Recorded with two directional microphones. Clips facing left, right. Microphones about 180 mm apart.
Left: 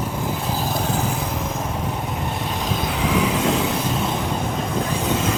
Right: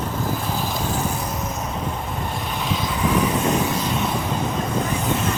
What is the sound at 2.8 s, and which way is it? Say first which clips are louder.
Vehicle: even; 75° left (ahead or behind).